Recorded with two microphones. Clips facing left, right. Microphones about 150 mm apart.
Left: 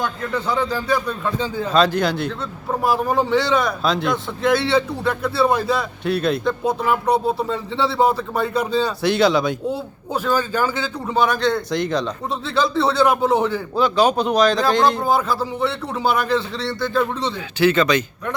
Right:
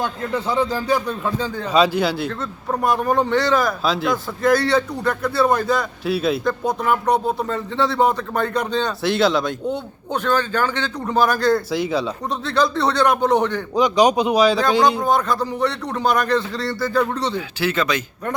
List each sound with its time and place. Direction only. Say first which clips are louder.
0.0 s a man's voice: even; 25° right (ahead or behind)
0.7 s a man's voice: right 1 dB; 15° right (ahead or behind); by 13.6 s 5° left (ahead or behind)
13.7 s speech: right 2 dB; 15° right (ahead or behind)
15.0 s a man's voice: even; 5° left (ahead or behind)